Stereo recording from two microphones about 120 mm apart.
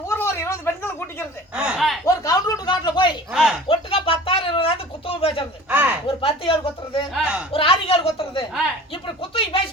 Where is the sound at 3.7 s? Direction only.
50° left (ahead or behind).